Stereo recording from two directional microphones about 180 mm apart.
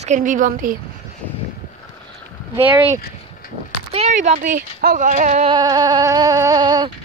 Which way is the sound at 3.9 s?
40° right (ahead or behind).